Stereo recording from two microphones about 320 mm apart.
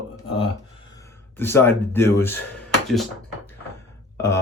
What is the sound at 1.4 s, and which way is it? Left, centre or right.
Speech, centre.